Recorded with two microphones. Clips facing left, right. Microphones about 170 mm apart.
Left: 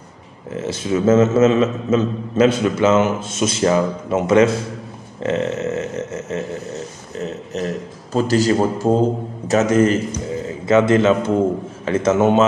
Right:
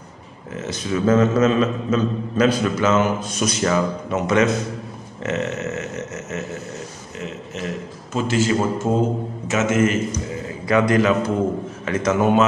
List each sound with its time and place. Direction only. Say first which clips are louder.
0.6 s a man's voice: left 3 dB; 25° left (ahead or behind)
10.7 s a man's voice: left 3 dB; 25° left (ahead or behind)